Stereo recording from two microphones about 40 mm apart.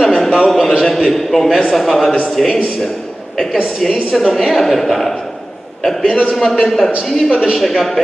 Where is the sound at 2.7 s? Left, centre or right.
Centre.